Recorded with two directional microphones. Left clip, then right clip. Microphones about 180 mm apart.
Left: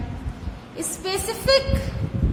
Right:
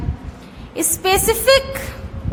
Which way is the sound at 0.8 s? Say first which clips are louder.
Right 10 dB; 45° right (ahead or behind).